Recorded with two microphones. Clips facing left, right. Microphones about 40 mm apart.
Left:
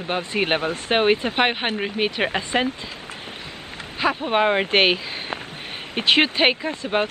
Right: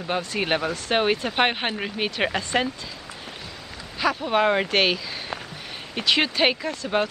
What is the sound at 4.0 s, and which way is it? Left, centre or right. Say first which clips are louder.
Speech: left 1 dB; left.